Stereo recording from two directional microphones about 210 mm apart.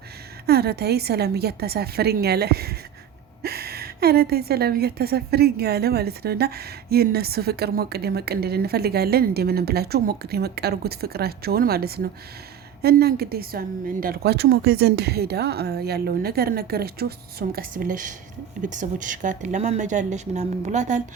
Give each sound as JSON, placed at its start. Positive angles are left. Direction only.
{"t": 0.4, "sound": "a woman's voice", "side_deg": -50}